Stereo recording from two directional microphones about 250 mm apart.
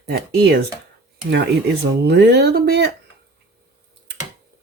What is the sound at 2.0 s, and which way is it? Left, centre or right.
Speech, right.